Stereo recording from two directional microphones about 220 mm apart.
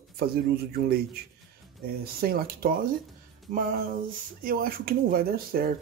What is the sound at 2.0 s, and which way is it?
Speech, 45° right (ahead or behind).